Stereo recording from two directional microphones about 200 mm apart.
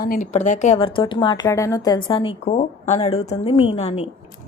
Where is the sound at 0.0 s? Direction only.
40° left (ahead or behind).